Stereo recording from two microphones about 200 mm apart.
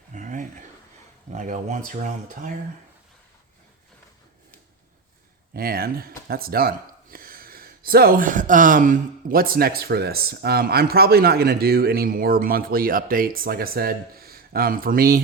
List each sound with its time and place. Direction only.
0.1 s a sound: 40° right (ahead or behind)
1.3 s speech: 35° right (ahead or behind)
5.5 s speech: 50° right (ahead or behind)